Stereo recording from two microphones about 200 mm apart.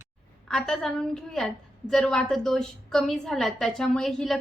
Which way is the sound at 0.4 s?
Centre (ahead or behind).